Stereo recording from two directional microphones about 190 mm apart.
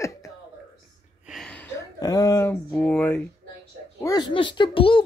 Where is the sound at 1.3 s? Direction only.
5° left (ahead or behind).